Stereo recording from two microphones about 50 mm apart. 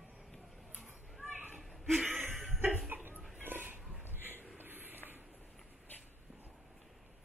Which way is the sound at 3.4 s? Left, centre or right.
Right.